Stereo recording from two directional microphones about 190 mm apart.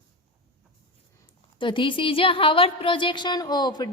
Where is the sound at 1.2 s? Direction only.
25° left (ahead or behind).